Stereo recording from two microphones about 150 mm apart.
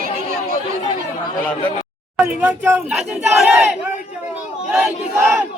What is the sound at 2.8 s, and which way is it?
Battle cry, 5° right (ahead or behind).